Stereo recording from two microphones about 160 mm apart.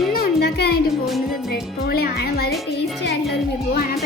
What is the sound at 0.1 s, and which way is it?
Music, 75° left (ahead or behind).